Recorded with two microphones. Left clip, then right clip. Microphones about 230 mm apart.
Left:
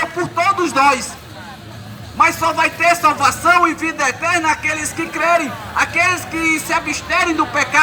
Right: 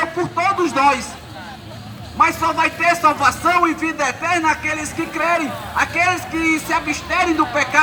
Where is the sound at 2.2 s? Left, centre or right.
Left.